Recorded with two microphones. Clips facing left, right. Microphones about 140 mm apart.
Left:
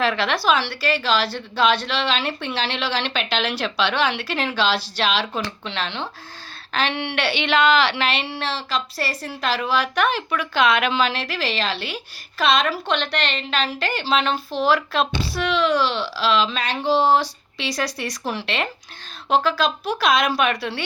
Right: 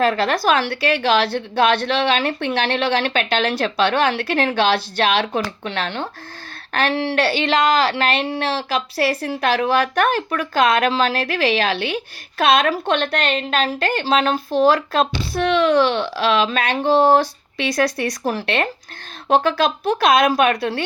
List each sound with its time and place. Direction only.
0.0 s a woman's voice: 45° right (ahead or behind)
6.9 s a woman's voice: 35° right (ahead or behind)